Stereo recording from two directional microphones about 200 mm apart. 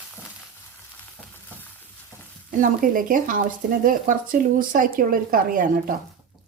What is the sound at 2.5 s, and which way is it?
Speech, 40° right (ahead or behind).